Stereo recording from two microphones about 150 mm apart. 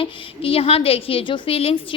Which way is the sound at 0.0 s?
40° left (ahead or behind).